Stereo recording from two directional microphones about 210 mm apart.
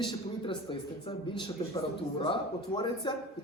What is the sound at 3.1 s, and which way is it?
Speech, 20° left (ahead or behind).